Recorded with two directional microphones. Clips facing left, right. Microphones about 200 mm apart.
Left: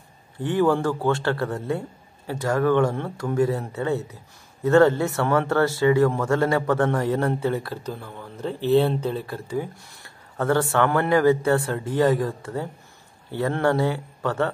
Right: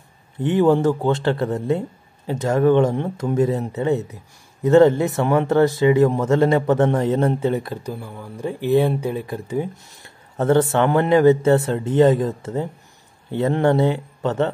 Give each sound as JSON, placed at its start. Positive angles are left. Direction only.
{"t": 0.4, "sound": "a man's voice", "side_deg": -20}